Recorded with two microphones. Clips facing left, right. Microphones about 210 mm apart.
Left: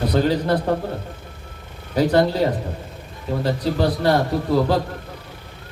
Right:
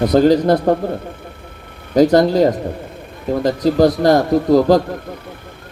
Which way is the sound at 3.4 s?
40° right (ahead or behind).